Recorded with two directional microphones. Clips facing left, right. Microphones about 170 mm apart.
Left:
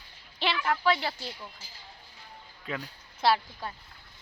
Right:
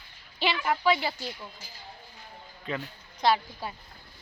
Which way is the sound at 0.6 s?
5° right (ahead or behind).